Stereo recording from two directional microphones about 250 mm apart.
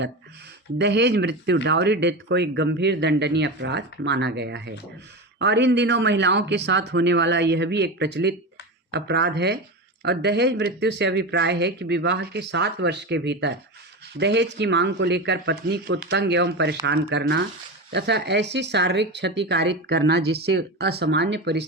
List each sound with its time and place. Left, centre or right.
0.8 s speech: right